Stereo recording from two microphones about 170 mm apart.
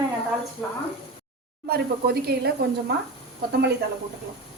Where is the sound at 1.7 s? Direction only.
65° right (ahead or behind).